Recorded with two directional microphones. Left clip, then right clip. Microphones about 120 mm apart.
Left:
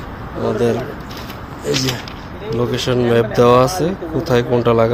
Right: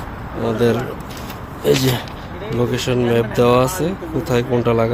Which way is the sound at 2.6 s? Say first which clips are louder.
Even; 25° right (ahead or behind).